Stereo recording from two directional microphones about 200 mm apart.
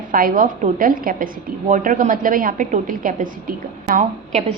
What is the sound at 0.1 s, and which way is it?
A woman's voice, 45° right (ahead or behind).